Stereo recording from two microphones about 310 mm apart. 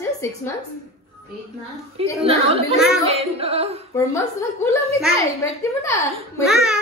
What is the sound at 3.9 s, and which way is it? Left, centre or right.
Speech, centre.